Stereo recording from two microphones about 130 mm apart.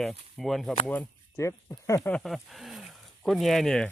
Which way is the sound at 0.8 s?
15° left (ahead or behind).